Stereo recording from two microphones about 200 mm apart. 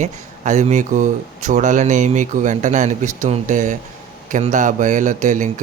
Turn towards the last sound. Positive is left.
turn(degrees=-40)  # may be behind; listen again after turning